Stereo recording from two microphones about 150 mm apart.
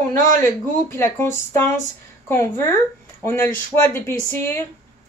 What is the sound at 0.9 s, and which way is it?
Speech, 15° left (ahead or behind).